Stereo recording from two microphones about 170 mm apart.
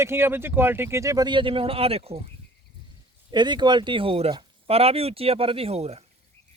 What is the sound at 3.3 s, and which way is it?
Speech, 25° right (ahead or behind).